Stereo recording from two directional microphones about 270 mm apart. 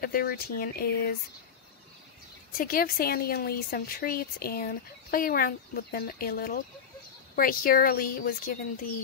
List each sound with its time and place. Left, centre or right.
0.0 s speech: left
2.5 s speech: left